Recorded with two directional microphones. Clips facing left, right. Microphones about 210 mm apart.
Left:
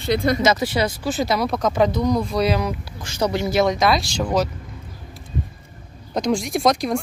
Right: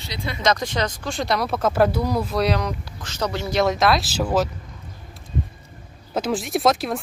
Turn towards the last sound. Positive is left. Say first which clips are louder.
# left 1 dB
turn(degrees=0)  # may be behind; listen again after turning